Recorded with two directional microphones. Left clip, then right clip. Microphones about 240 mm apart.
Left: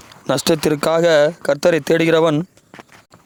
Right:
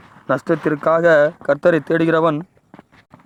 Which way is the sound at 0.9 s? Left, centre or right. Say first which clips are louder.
Right 1 dB; left.